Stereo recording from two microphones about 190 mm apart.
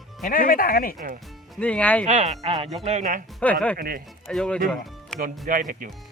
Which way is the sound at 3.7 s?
50° right (ahead or behind).